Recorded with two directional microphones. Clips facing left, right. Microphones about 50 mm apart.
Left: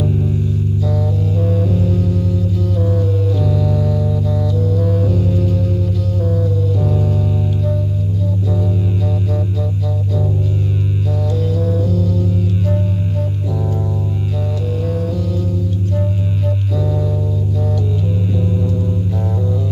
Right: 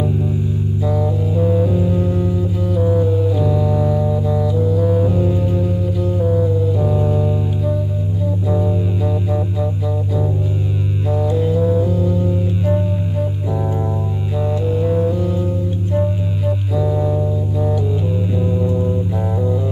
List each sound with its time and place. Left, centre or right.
0.8 s music: centre
16.0 s music: centre